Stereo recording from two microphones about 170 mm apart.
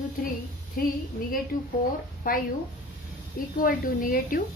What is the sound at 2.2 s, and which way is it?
Speech, 55° left (ahead or behind).